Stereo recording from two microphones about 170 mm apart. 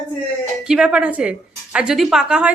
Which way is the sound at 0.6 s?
5° right (ahead or behind).